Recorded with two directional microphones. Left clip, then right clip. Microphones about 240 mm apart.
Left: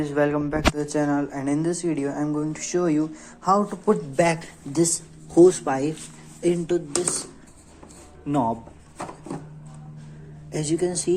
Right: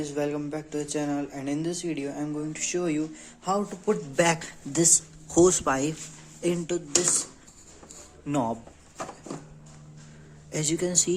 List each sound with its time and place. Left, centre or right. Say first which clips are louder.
0.0 s speech: left 7 dB; centre
3.8 s speech: left 2 dB; centre
8.3 s speech: left 4 dB; centre
10.5 s speech: left 2 dB; centre